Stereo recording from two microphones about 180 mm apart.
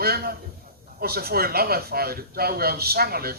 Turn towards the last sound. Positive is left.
turn(degrees=-60)  # may be behind; listen again after turning